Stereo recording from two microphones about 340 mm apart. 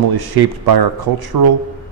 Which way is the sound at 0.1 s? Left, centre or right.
Right.